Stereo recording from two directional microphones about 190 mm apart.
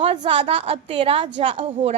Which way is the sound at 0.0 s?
30° right (ahead or behind).